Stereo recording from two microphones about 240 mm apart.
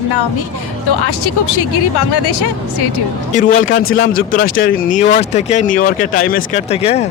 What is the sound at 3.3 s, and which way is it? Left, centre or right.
Speech, left.